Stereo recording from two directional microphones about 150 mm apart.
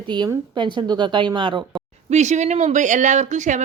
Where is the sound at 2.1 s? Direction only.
50° right (ahead or behind).